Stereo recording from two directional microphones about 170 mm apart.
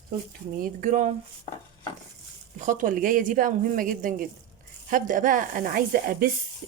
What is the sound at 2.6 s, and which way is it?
Speech, 50° right (ahead or behind).